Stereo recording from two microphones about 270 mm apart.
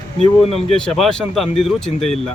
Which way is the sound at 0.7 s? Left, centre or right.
Centre.